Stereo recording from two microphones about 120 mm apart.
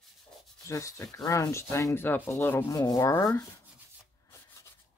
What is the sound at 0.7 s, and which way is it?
Speech, 25° left (ahead or behind).